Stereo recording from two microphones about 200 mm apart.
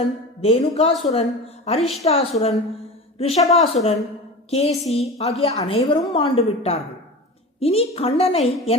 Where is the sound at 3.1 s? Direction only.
30° left (ahead or behind).